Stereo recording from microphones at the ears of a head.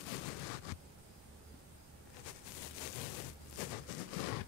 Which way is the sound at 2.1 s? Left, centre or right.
Left.